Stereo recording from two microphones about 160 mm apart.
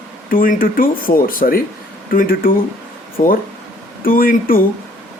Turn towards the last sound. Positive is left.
turn(degrees=65)  # may be behind; listen again after turning